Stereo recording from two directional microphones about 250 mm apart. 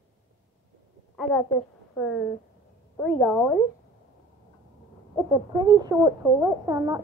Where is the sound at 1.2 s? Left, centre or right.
Centre.